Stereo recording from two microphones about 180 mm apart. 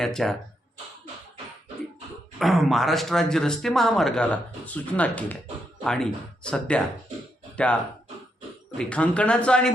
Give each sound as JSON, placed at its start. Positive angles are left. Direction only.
{"t": 0.0, "sound": "speech", "side_deg": 0}
{"t": 2.4, "sound": "speech", "side_deg": 0}
{"t": 8.8, "sound": "speech", "side_deg": 5}